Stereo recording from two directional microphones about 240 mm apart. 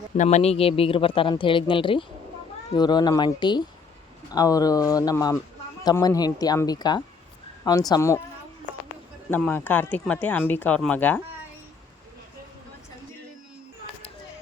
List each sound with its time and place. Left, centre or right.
0.2 s speech: left; by 8.2 s centre
9.3 s speech: centre